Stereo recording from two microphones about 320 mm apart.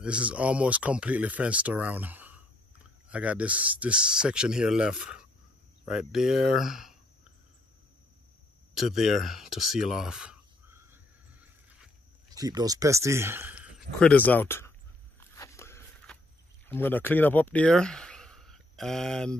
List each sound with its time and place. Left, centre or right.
0.0 s speech: centre
8.7 s speech: centre
11.4 s a sound: centre
15.1 s biting: centre
16.6 s speech: centre